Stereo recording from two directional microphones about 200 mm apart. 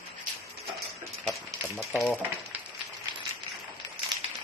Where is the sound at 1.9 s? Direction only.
Centre (ahead or behind).